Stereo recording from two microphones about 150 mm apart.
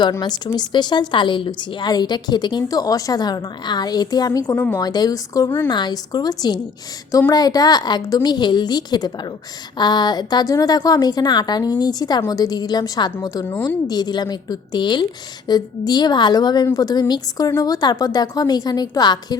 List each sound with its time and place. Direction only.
0.0 s a woman's voice: 30° left (ahead or behind)
4.4 s a woman's voice: 10° left (ahead or behind)
4.8 s a woman's voice: 25° left (ahead or behind)